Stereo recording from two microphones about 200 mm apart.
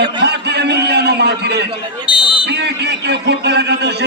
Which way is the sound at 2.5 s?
55° right (ahead or behind).